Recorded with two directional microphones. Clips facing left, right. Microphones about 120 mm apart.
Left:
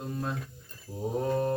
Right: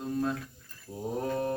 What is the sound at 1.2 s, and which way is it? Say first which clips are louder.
Music: left 3 dB; 20° left (ahead or behind).